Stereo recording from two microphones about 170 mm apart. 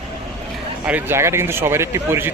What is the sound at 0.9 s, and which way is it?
Speech, 10° right (ahead or behind).